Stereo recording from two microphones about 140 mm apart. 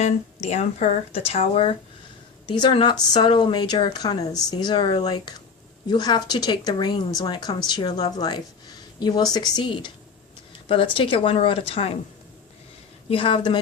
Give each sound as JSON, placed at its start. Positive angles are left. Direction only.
{"t": 0.0, "sound": "speech", "side_deg": 50}
{"t": 2.5, "sound": "a woman's voice", "side_deg": 35}
{"t": 13.1, "sound": "speech", "side_deg": 40}